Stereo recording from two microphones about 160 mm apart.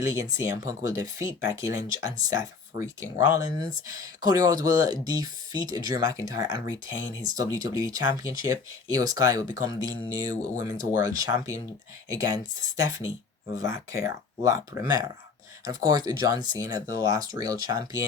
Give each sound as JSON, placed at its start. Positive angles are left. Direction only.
{"t": 0.0, "sound": "speech", "side_deg": -20}
{"t": 13.6, "sound": "speech", "side_deg": -20}